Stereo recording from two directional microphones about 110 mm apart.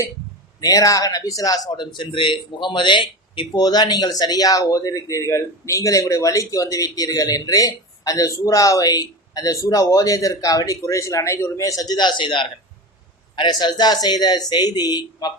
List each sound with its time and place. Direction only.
0.6 s speech: 30° left (ahead or behind)